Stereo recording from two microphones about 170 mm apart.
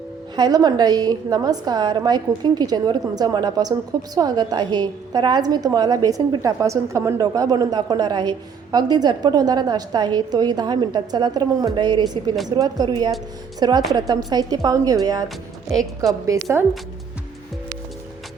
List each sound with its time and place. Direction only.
0.3 s a woman's voice: 25° right (ahead or behind)